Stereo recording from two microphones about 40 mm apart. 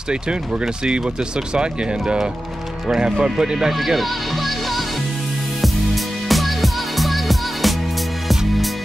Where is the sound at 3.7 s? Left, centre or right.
Centre.